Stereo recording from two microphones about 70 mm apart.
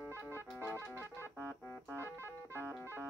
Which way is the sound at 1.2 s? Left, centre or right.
Left.